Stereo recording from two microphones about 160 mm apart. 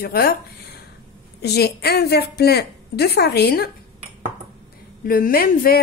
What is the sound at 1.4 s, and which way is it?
A woman's voice, 90° left.